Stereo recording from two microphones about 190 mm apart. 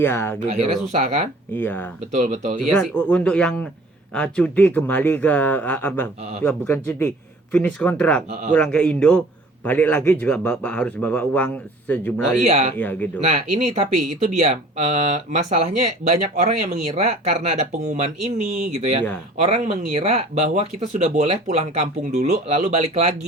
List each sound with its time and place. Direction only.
0.0 s a man's voice: 10° left (ahead or behind)
0.3 s speech: 35° right (ahead or behind)
1.5 s a man's voice: 10° left (ahead or behind)
2.1 s speech: 40° right (ahead or behind)
2.7 s a man's voice: 5° left (ahead or behind)
12.5 s speech: 35° right (ahead or behind)
12.7 s a man's voice: 10° left (ahead or behind)
13.2 s speech: 35° right (ahead or behind)